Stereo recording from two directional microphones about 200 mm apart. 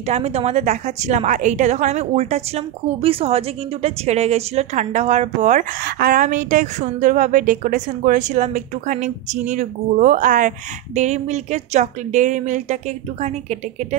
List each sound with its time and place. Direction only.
0.0 s a woman's voice: 30° right (ahead or behind)